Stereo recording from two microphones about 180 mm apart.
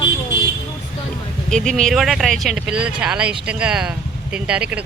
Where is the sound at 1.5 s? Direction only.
Centre (ahead or behind).